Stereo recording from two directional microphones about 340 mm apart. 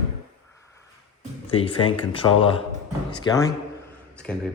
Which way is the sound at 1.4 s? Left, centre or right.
Centre.